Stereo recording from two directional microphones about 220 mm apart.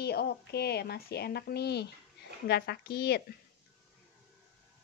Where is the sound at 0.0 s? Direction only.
45° left (ahead or behind).